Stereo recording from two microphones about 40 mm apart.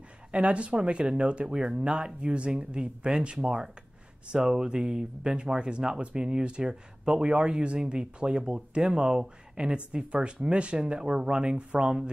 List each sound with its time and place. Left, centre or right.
0.3 s speech: right